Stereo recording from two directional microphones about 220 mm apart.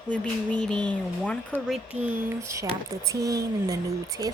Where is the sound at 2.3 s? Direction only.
15° right (ahead or behind).